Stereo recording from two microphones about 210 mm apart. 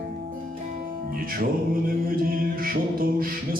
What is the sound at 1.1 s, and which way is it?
Music, 40° right (ahead or behind).